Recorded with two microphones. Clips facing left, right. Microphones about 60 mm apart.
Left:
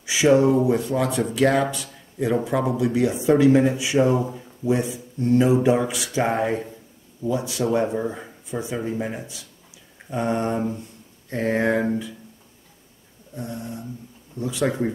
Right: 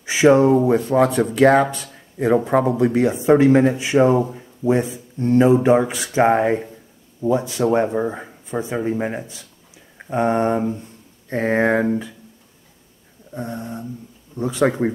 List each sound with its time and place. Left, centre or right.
0.0 s speech: right
0.7 s mantra: right
1.3 s speech: right
2.3 s mantra: right
13.3 s mantra: right